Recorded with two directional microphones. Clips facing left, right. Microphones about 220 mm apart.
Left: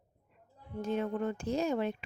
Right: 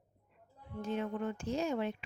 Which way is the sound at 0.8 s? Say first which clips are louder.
Left 3 dB; 40° left (ahead or behind).